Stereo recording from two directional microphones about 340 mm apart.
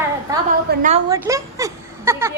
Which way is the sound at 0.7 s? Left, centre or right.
Right.